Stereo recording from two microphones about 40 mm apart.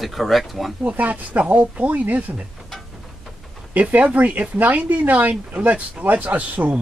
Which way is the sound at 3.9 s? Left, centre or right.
Right.